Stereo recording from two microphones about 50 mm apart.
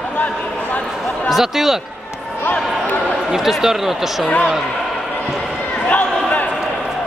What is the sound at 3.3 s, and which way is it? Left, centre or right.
Speech, centre.